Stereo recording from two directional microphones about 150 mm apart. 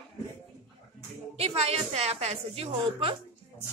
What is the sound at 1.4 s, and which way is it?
A woman's voice, 45° right (ahead or behind).